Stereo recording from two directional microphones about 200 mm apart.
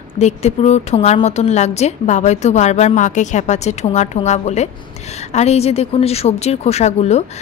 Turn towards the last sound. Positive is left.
turn(degrees=35)  # may be behind; listen again after turning